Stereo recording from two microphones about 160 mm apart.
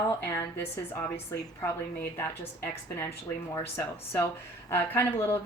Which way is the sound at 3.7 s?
15° left (ahead or behind).